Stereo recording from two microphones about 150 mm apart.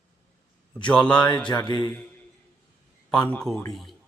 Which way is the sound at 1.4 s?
30° left (ahead or behind).